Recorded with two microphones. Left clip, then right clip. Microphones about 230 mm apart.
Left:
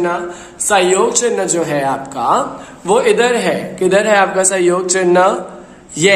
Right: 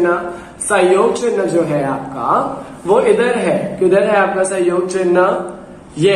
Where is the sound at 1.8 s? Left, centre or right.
Left.